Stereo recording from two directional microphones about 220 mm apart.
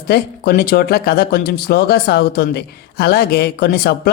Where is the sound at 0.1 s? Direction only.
45° left (ahead or behind).